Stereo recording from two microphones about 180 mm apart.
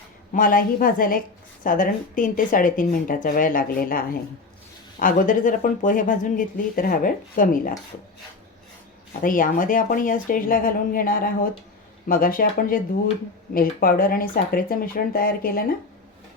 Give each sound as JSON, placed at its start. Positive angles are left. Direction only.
{"t": 0.3, "sound": "speech", "side_deg": 50}
{"t": 9.2, "sound": "speech", "side_deg": 50}